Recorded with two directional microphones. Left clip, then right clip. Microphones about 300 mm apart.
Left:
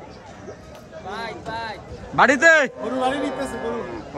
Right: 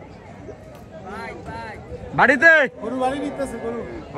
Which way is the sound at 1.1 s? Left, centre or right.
Left.